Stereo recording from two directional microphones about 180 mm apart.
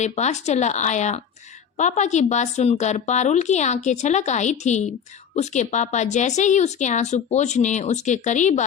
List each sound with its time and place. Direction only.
0.0 s a woman's voice: 40° left (ahead or behind)